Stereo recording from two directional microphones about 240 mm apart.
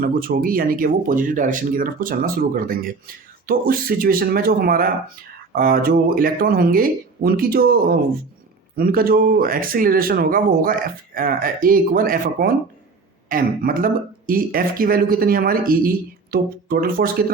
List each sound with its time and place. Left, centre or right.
0.0 s speech: right